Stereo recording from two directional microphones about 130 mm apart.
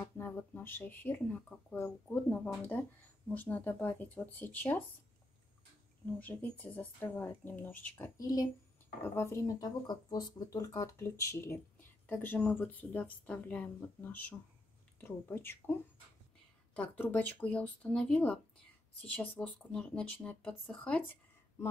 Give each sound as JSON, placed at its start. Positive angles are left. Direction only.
{"t": 0.0, "sound": "speech", "side_deg": 15}
{"t": 6.1, "sound": "speech", "side_deg": 10}
{"t": 16.7, "sound": "speech", "side_deg": 10}